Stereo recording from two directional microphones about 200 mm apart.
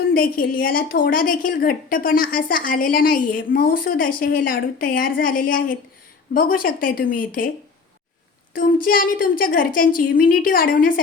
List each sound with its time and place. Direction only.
0.1 s a woman's voice: 45° left (ahead or behind)
8.5 s a woman's voice: 45° left (ahead or behind)